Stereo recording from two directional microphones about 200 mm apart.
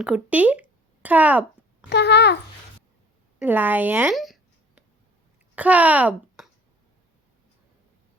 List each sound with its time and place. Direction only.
0.0 s speech: 5° right (ahead or behind)
1.9 s a child's voice: 55° left (ahead or behind)
3.4 s speech: 10° right (ahead or behind)